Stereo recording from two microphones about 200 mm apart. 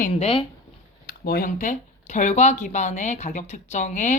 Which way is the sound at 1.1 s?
50° left (ahead or behind).